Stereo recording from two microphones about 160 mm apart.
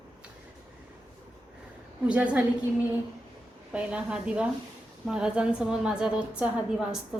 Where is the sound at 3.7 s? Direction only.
5° right (ahead or behind).